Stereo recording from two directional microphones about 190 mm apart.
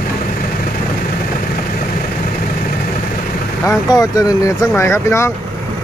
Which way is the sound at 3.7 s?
20° left (ahead or behind).